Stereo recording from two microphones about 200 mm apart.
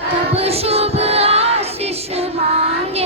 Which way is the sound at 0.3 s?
30° right (ahead or behind).